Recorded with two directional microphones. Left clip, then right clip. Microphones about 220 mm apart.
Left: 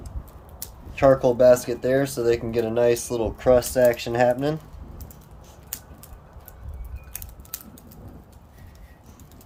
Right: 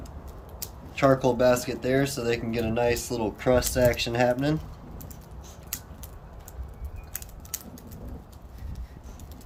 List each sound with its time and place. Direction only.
0.9 s speech: 20° left (ahead or behind)